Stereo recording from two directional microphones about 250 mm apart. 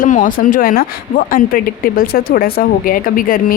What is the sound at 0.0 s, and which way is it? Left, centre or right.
Speech, left.